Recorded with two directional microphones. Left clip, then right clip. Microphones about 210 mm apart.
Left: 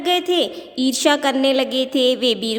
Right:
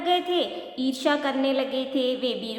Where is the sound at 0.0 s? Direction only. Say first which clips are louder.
Left 5 dB; 50° left (ahead or behind).